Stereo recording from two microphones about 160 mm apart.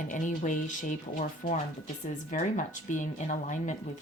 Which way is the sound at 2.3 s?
50° left (ahead or behind).